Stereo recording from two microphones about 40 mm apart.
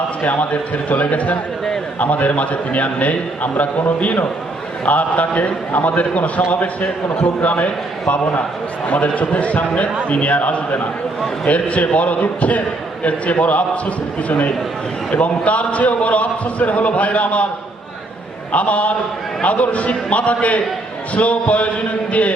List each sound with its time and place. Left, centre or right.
0.2 s a man's voice: left
18.5 s a man's voice: left